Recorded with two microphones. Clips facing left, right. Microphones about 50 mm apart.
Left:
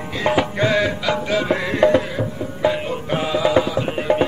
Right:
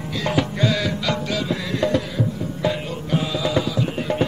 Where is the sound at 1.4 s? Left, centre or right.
Left.